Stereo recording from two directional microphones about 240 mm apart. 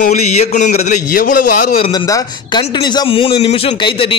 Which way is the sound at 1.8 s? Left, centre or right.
Centre.